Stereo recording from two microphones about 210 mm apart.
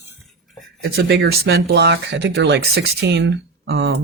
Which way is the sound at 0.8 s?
50° right (ahead or behind).